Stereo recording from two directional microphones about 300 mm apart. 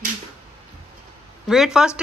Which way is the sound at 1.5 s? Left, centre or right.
Centre.